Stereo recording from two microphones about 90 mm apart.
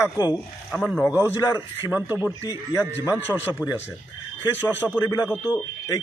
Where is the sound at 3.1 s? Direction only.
20° left (ahead or behind).